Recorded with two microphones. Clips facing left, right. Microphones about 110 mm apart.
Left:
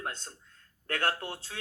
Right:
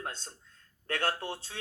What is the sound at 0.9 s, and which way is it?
Speech, 30° right (ahead or behind).